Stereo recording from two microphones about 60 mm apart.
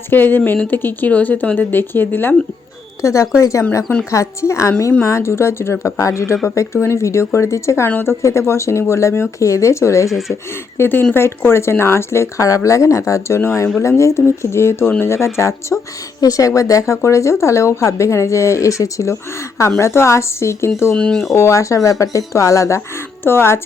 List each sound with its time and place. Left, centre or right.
0.1 s speech: left
3.0 s speech: left
6.0 s speech: left
6.4 s speech: left
9.4 s speech: left
10.1 s speech: centre
10.8 s speech: left
16.2 s speech: left
20.9 s speech: centre
21.3 s speech: left
23.2 s speech: left